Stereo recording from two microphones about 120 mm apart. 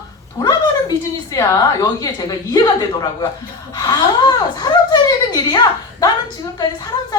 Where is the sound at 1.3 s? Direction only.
30° left (ahead or behind).